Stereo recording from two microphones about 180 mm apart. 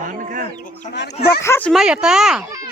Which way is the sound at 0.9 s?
65° left (ahead or behind).